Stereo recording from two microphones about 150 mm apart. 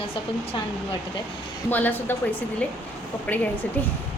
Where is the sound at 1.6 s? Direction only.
10° left (ahead or behind).